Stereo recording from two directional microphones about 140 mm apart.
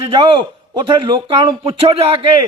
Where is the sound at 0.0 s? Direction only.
35° right (ahead or behind).